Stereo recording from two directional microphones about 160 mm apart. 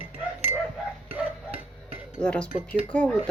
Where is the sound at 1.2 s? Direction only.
10° right (ahead or behind).